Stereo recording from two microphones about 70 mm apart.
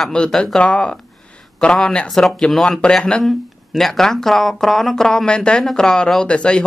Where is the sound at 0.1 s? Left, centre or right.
Centre.